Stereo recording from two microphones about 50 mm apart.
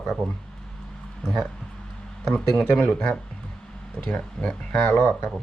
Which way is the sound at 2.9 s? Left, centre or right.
Centre.